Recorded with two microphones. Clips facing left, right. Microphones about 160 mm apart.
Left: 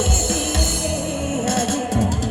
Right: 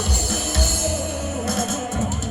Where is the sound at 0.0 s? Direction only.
20° left (ahead or behind).